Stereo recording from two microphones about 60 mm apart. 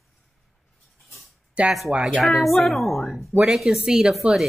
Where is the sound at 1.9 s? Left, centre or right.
Centre.